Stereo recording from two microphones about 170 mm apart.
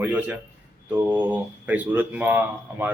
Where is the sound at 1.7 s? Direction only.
10° right (ahead or behind).